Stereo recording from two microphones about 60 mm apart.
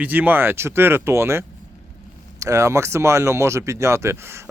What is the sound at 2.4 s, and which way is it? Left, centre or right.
Speech, right.